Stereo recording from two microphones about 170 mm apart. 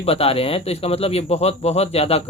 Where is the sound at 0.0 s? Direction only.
35° left (ahead or behind).